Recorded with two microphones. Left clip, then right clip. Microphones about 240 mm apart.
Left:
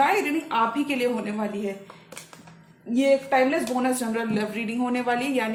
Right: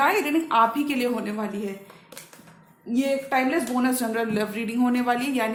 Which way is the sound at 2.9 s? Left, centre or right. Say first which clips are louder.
Left 3 dB; right.